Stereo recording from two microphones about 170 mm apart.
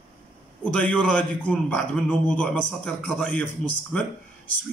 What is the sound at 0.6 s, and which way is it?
A man's voice, 5° left (ahead or behind).